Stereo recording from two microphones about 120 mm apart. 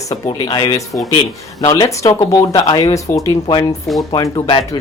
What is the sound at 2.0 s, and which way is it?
A woman's voice, 30° left (ahead or behind).